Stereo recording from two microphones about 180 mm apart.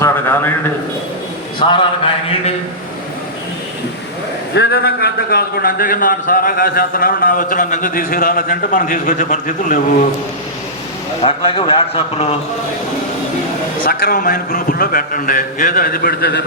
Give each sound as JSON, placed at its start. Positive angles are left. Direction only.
{"t": 0.0, "sound": "a sound", "side_deg": 15}
{"t": 1.5, "sound": "a man's voice", "side_deg": 25}
{"t": 4.5, "sound": "speech", "side_deg": 65}
{"t": 11.2, "sound": "a man's voice", "side_deg": 30}
{"t": 13.8, "sound": "speech", "side_deg": 50}